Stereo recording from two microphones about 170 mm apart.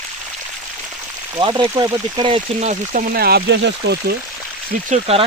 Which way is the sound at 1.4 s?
30° right (ahead or behind).